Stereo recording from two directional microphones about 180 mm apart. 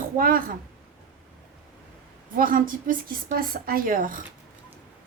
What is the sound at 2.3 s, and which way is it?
A woman's voice, 50° right (ahead or behind).